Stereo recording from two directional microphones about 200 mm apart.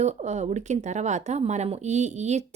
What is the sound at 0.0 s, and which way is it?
Speech, 35° right (ahead or behind).